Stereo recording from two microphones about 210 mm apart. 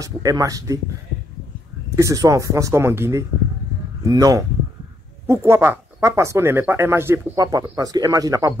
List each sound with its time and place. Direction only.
0.0 s speech: 15° right (ahead or behind)
2.0 s speech: 15° right (ahead or behind)